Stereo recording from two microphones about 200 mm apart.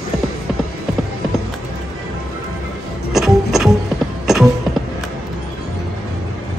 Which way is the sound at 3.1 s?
Centre (ahead or behind).